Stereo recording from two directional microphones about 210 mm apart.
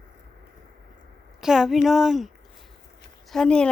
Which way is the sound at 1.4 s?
Centre (ahead or behind).